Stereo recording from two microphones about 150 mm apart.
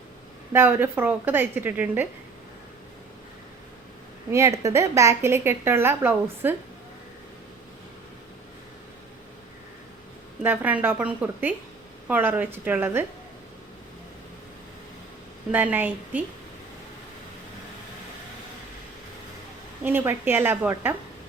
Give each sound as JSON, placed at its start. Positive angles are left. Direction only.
{"t": 0.5, "sound": "a woman's voice", "side_deg": -15}
{"t": 4.3, "sound": "a woman's voice", "side_deg": -20}
{"t": 10.4, "sound": "a woman's voice", "side_deg": -10}
{"t": 15.5, "sound": "a woman's voice", "side_deg": -10}
{"t": 19.8, "sound": "a woman's voice", "side_deg": -10}